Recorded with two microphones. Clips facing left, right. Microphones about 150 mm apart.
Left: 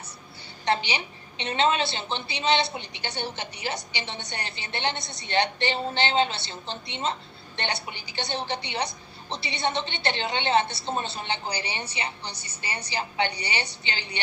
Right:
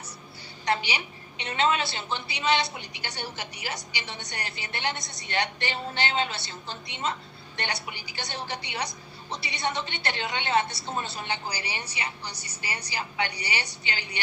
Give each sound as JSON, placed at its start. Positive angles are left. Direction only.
{"t": 0.6, "sound": "a woman's voice", "side_deg": 25}